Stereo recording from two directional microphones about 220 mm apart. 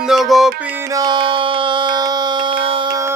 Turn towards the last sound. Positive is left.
turn(degrees=-20)  # may be behind; listen again after turning